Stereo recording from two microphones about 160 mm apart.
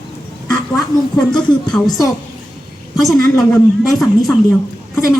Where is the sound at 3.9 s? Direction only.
Centre (ahead or behind).